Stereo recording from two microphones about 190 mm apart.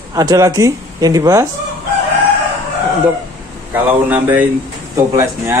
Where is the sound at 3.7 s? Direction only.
10° right (ahead or behind).